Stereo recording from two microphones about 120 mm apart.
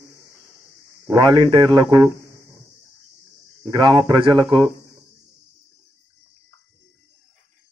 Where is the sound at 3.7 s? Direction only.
35° right (ahead or behind).